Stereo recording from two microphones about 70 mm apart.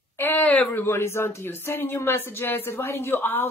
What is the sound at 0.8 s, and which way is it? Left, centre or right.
Speech, left.